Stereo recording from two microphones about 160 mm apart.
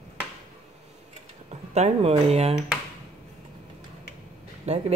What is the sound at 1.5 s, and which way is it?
Speech, 45° right (ahead or behind).